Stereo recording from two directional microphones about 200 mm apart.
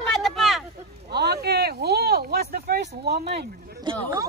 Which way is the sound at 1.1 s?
55° right (ahead or behind).